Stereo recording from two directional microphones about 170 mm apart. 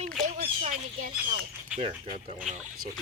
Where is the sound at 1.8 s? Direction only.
35° right (ahead or behind).